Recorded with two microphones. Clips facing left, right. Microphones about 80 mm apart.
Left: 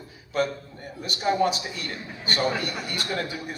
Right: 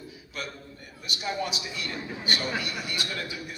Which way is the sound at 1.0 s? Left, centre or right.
Left.